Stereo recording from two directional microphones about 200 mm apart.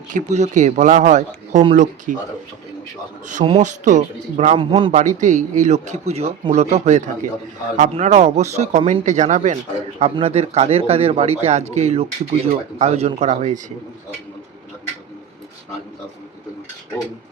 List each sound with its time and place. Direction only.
0.1 s speech: 35° right (ahead or behind)
3.4 s speech: 30° right (ahead or behind)